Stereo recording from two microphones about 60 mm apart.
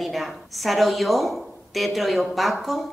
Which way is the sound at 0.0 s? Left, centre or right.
Centre.